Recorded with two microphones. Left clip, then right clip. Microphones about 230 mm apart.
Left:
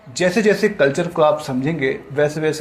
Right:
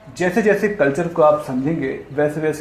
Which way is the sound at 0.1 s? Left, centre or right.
Left.